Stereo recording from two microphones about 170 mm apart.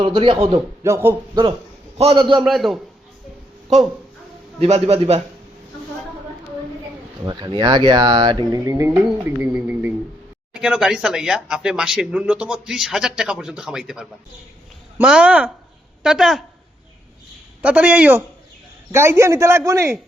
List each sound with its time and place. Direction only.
0.0 s speech: 30° right (ahead or behind)
0.8 s a man's voice: 15° right (ahead or behind)
2.0 s speech: 30° right (ahead or behind)
2.4 s speech: centre (ahead or behind)
4.6 s a man's voice: 35° right (ahead or behind)
7.3 s a man's voice: 25° right (ahead or behind); by 16.4 s centre (ahead or behind)
17.6 s a man's voice: 5° right (ahead or behind)